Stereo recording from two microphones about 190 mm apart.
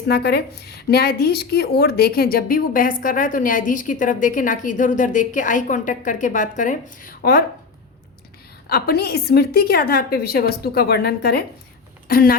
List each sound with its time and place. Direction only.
0.1 s a woman's voice: 60° left (ahead or behind)
8.7 s a woman's voice: 55° left (ahead or behind)